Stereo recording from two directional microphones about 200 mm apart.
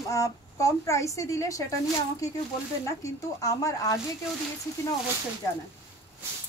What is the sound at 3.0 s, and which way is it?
A woman's voice, 15° left (ahead or behind).